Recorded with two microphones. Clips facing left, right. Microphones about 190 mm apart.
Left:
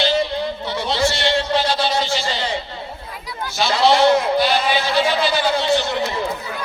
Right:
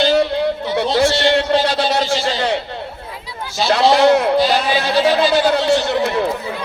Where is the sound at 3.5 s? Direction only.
65° right (ahead or behind).